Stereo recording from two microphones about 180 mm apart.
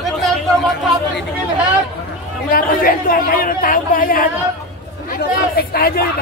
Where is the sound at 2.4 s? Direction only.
55° left (ahead or behind).